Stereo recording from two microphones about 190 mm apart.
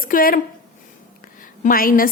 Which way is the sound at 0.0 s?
50° left (ahead or behind).